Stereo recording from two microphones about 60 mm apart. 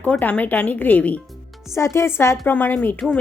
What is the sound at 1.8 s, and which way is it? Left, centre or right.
Speech, left.